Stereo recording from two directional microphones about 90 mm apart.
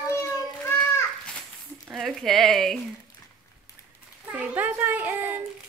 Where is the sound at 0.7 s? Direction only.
25° left (ahead or behind).